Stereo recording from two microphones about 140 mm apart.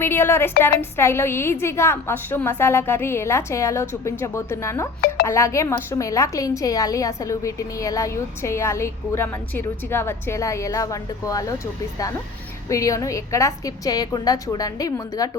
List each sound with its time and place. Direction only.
0.0 s a woman's voice: 15° left (ahead or behind)
12.6 s a woman's voice: 25° left (ahead or behind)